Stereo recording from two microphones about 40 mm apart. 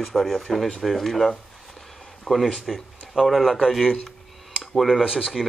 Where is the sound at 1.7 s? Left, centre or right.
Centre.